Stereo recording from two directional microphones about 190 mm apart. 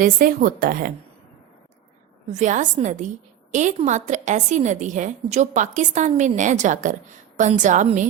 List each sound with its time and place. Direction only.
0.0 s a woman's voice: 45° right (ahead or behind)
2.3 s a woman's voice: 40° right (ahead or behind)